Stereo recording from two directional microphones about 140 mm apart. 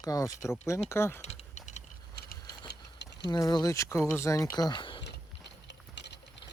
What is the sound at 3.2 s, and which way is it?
Speech, 30° left (ahead or behind).